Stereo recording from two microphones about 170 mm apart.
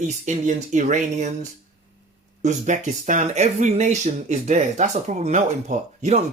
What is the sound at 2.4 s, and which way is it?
Speech, 45° right (ahead or behind).